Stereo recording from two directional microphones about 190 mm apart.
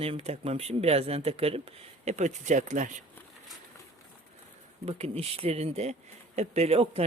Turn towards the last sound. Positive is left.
turn(degrees=-30)  # may be behind; listen again after turning